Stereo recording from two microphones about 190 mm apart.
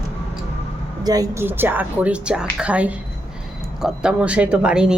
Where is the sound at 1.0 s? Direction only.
20° right (ahead or behind).